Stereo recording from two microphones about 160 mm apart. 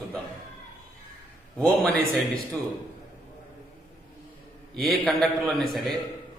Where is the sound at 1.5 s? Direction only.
5° left (ahead or behind).